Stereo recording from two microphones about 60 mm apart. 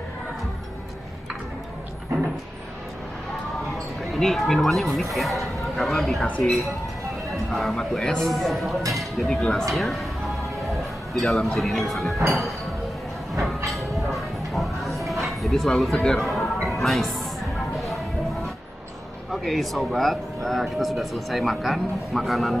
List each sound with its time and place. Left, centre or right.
4.1 s speech: centre
6.2 s speech: left
7.5 s speech: centre
9.4 s speech: centre
9.7 s speech: centre
11.1 s speech: centre
13.7 s music: centre
15.2 s speech: centre
16.6 s music: centre
19.3 s speech: centre